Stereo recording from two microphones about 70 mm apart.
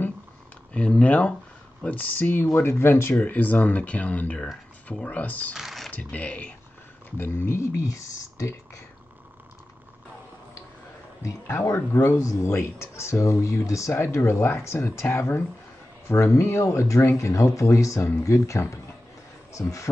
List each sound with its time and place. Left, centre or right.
0.7 s speech: centre
5.5 s typing: centre
5.9 s speech: centre
7.2 s speech: left
7.8 s speech: left
11.2 s speech: left
19.6 s speech: centre